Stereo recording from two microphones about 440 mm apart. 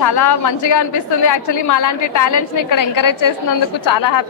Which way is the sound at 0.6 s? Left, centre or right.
Left.